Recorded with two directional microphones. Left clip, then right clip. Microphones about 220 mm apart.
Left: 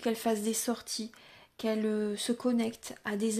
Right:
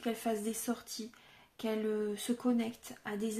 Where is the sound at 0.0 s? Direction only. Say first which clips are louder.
Left 5 dB; 40° left (ahead or behind).